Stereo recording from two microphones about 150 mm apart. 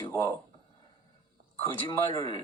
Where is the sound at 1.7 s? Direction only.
35° left (ahead or behind).